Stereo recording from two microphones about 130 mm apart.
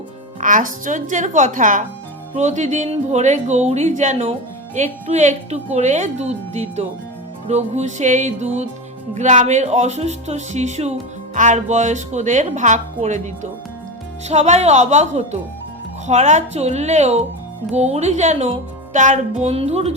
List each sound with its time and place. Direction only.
0.3 s speech: 90° right
2.3 s speech: 65° right (ahead or behind)